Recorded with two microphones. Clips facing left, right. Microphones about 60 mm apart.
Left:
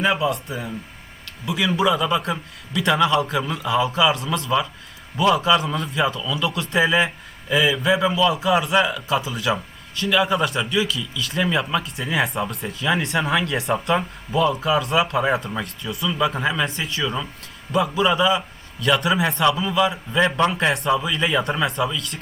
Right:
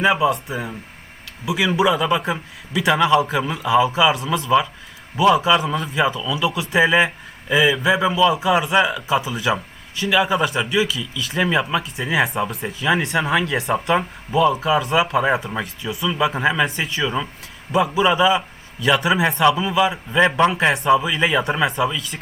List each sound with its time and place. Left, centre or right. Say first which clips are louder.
0.0 s speech: right 3 dB; centre
17.7 s a man's voice: right 2 dB; right
18.1 s speech: right 2 dB; centre